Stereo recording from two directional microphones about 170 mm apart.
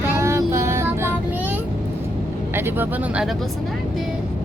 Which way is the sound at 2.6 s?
10° right (ahead or behind).